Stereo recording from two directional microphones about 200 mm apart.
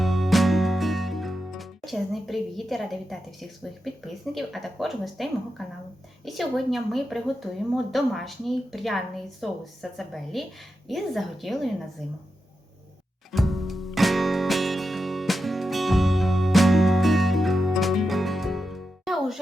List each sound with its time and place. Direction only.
0.0 s music: centre (ahead or behind)
6.2 s a woman's voice: centre (ahead or behind)
13.3 s music: centre (ahead or behind)